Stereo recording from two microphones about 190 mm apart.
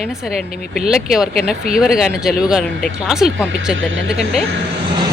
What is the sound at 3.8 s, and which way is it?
Speech, 90° right.